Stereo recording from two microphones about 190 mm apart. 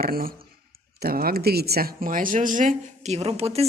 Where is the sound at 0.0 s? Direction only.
50° right (ahead or behind).